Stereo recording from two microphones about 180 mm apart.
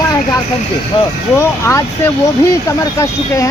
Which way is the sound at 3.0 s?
15° left (ahead or behind).